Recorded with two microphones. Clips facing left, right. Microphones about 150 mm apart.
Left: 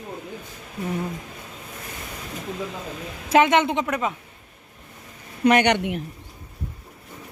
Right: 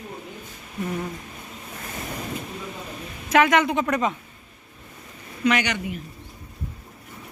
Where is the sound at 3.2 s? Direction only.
30° left (ahead or behind).